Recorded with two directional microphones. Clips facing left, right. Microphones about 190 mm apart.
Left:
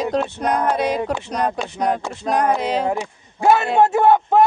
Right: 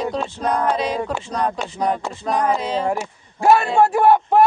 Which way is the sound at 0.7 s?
60° left (ahead or behind).